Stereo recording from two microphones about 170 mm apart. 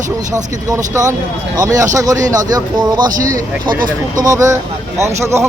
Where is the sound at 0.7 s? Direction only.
20° right (ahead or behind).